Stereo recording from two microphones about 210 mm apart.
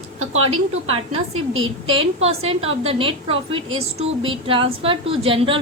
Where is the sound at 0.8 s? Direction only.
30° right (ahead or behind).